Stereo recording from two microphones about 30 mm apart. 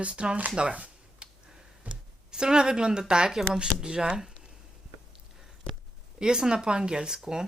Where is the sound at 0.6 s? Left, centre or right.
Right.